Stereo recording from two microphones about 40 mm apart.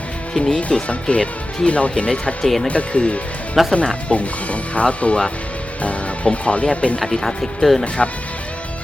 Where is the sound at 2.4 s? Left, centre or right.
Centre.